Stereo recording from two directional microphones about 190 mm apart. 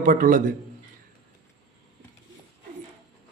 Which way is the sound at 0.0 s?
45° right (ahead or behind).